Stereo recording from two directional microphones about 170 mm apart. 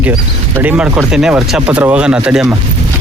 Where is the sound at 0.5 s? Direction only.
10° right (ahead or behind).